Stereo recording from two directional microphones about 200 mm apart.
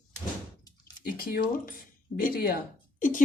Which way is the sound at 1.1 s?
50° left (ahead or behind).